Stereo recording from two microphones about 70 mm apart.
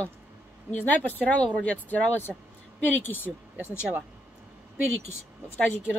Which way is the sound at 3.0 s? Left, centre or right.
Left.